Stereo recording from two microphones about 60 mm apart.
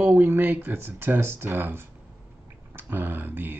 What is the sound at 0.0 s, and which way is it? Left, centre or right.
Speech, right.